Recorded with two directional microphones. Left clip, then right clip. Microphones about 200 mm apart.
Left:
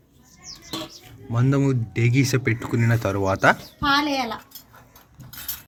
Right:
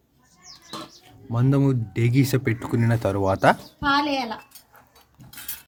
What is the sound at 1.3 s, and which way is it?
Speech, 10° right (ahead or behind).